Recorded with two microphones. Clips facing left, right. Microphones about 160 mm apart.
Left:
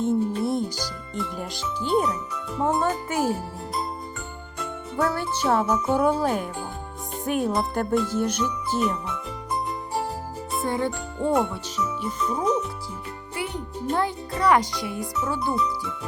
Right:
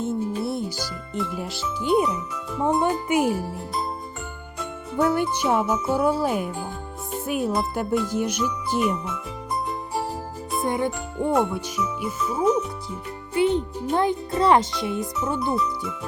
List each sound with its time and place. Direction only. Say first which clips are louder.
0.0 s music: left 2 dB; 5° right (ahead or behind)
1.1 s speech: right 3 dB; centre (ahead or behind)
2.8 s speech: right 3 dB; 15° right (ahead or behind)
4.9 s speech: right 4 dB; 20° right (ahead or behind)
5.8 s speech: even; 5° right (ahead or behind)
10.6 s music: right 2 dB; 15° right (ahead or behind)
11.8 s speech: left 2 dB; centre (ahead or behind)
13.3 s music: right 11 dB; 25° right (ahead or behind)
13.9 s speech: right 4 dB; 20° right (ahead or behind)